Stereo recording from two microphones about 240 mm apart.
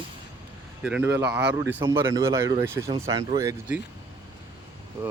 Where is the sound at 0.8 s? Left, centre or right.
Centre.